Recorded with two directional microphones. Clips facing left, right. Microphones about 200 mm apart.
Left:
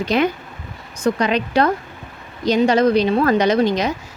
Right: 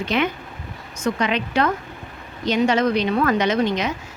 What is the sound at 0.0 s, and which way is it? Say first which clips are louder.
Speech: left 4 dB; 40° left (ahead or behind).